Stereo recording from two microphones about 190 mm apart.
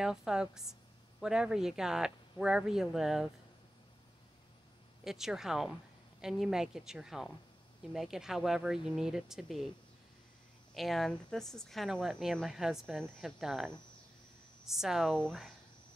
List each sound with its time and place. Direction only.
0.0 s speech: 5° right (ahead or behind)
5.0 s speech: centre (ahead or behind)
10.7 s speech: centre (ahead or behind)
14.7 s speech: centre (ahead or behind)